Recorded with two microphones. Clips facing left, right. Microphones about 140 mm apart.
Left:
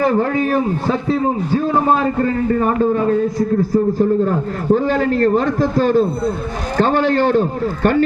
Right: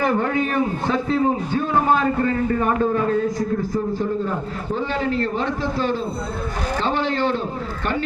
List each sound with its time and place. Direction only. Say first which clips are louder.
0.0 s a man's voice: left 4 dB; 35° left (ahead or behind)
4.7 s a man's voice: left 8 dB; 45° left (ahead or behind)